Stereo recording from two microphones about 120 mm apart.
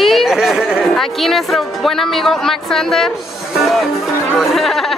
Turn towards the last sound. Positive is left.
turn(degrees=0)  # may be behind; listen again after turning